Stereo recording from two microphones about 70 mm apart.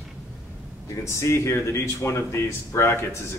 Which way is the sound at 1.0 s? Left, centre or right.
Left.